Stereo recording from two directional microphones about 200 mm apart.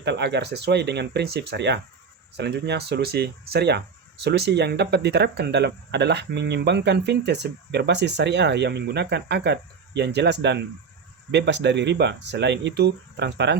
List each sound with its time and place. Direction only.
0.0 s speech: 60° right (ahead or behind)